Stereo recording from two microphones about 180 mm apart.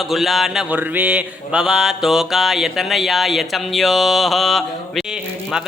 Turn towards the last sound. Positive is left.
turn(degrees=-5)  # may be behind; listen again after turning